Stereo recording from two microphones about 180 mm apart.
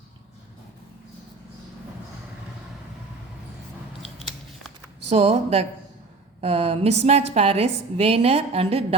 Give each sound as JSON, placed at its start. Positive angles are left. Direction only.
{"t": 5.0, "sound": "a woman's voice", "side_deg": -35}